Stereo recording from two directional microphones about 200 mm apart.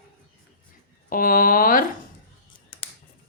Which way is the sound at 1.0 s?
45° left (ahead or behind).